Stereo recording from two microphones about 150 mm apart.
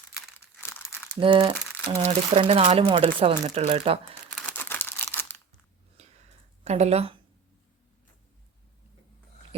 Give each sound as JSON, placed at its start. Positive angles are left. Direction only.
{"t": 0.3, "sound": "crumpling", "side_deg": 15}
{"t": 1.2, "sound": "speech", "side_deg": -35}
{"t": 2.0, "sound": "speech", "side_deg": -50}
{"t": 4.4, "sound": "a sound", "side_deg": 10}
{"t": 6.7, "sound": "speech", "side_deg": -45}